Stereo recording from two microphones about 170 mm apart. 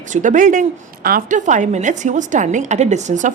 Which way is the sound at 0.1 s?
50° right (ahead or behind).